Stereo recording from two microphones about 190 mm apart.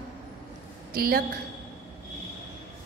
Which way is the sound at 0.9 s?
50° right (ahead or behind).